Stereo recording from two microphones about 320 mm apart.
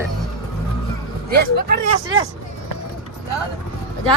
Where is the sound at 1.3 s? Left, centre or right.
Right.